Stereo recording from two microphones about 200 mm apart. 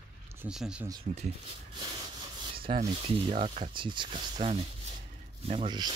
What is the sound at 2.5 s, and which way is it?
Rub, 25° right (ahead or behind).